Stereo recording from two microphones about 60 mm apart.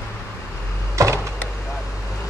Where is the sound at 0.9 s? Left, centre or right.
Right.